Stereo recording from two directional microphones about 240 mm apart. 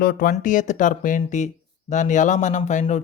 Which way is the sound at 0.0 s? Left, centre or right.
Left.